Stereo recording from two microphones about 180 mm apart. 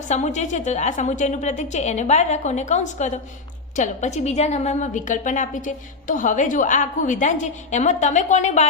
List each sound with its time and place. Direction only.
0.1 s a woman's voice: 40° left (ahead or behind)